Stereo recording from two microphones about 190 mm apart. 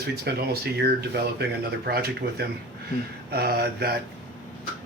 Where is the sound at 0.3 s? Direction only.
55° right (ahead or behind).